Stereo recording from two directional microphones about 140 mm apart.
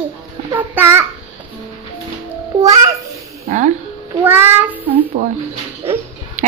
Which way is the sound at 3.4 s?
60° right (ahead or behind).